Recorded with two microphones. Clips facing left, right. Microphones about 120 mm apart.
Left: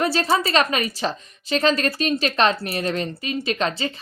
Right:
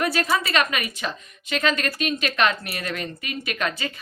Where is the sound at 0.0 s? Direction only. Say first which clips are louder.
Left 3 dB; 30° left (ahead or behind).